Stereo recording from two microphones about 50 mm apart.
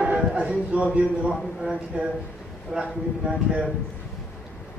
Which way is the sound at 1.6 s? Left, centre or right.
Centre.